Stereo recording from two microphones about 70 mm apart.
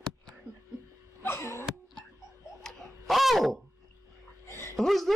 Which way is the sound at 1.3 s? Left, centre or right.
Left.